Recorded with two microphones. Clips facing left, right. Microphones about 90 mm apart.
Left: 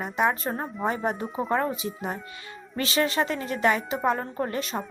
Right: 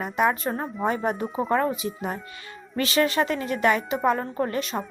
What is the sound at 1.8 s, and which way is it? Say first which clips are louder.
Speech: right 2 dB; 40° right (ahead or behind).